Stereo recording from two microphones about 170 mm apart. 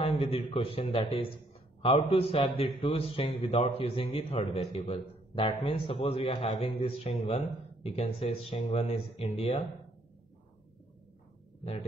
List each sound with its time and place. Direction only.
0.0 s a man's voice: 35° left (ahead or behind)